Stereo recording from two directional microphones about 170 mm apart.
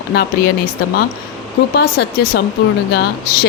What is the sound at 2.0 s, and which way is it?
Speech, 70° left (ahead or behind).